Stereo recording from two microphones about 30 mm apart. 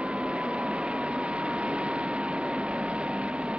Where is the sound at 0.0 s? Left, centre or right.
Right.